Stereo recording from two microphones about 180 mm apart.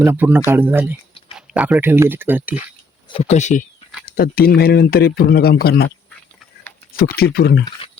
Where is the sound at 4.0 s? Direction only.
55° left (ahead or behind).